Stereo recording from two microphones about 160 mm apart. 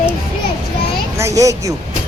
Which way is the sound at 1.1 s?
20° right (ahead or behind).